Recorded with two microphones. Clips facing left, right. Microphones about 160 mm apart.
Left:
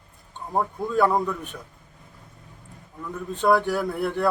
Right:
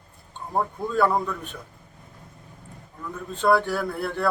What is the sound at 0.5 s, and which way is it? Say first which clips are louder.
Speech: left 1 dB; 15° left (ahead or behind).